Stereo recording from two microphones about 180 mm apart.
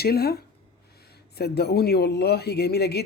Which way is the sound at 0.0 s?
60° left (ahead or behind).